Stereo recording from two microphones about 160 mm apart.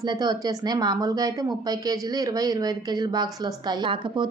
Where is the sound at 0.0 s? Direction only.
25° right (ahead or behind).